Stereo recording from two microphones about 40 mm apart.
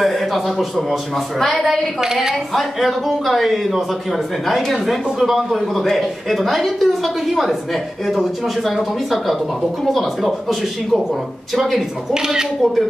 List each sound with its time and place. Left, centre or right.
0.0 s a man's voice: centre
2.0 s speech: centre
2.5 s a man's voice: centre
8.6 s a man's voice: centre
12.1 s speech: centre